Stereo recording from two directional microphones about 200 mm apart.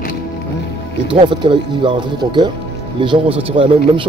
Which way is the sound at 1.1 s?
25° right (ahead or behind).